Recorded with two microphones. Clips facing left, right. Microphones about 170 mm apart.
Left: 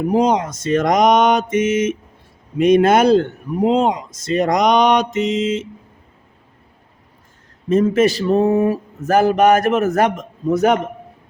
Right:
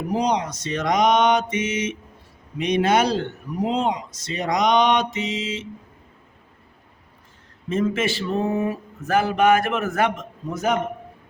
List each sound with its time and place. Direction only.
0.1 s speech: 50° left (ahead or behind)
7.7 s speech: 40° left (ahead or behind)
10.5 s a man's voice: 70° left (ahead or behind)